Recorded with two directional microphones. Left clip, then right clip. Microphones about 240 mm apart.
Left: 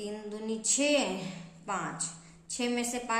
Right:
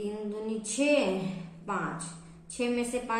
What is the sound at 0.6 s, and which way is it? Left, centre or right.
Speech, left.